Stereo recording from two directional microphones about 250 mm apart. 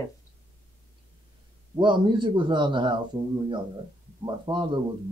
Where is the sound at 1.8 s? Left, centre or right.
Centre.